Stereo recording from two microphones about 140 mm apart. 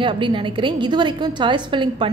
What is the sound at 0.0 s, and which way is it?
A woman's voice, 35° right (ahead or behind).